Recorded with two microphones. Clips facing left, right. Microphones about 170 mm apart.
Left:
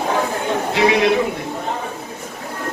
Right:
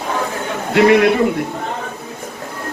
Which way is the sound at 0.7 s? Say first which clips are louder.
Right 6 dB; 55° right (ahead or behind).